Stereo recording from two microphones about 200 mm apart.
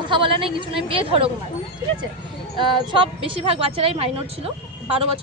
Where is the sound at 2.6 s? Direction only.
25° right (ahead or behind).